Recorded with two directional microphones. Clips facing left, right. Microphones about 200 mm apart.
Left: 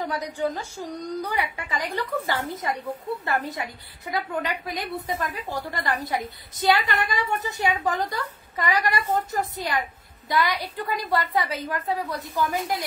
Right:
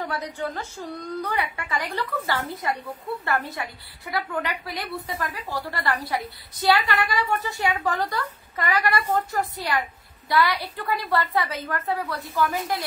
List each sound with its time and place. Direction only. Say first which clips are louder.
0.0 s a woman's voice: left 3 dB; 15° left (ahead or behind)